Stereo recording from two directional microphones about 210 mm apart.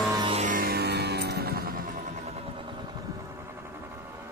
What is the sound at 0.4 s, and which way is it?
Music, 40° right (ahead or behind).